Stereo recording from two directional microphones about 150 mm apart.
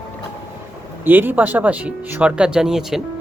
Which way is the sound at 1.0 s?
15° right (ahead or behind).